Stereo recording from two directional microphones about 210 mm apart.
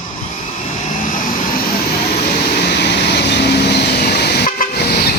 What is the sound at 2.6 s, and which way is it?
Vehicle, 50° left (ahead or behind).